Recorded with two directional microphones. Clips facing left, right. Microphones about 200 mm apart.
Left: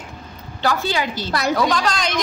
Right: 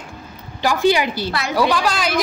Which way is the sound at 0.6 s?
15° right (ahead or behind).